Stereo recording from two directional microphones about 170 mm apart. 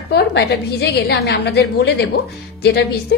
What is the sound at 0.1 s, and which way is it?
A woman's voice, 80° left.